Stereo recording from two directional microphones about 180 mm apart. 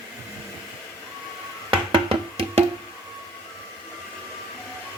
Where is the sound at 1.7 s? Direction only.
30° right (ahead or behind).